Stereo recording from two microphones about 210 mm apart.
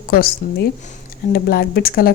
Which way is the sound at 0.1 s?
45° left (ahead or behind).